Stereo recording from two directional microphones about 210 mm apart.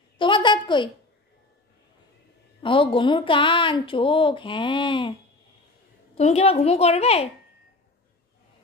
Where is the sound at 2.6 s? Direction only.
25° left (ahead or behind).